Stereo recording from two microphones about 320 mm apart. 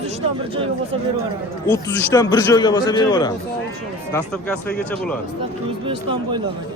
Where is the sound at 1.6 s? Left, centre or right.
Centre.